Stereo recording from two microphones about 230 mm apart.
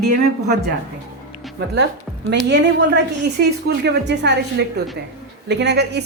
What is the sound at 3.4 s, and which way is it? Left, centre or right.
A woman's voice, right.